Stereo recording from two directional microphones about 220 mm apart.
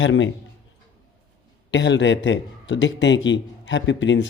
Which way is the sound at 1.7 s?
55° left (ahead or behind).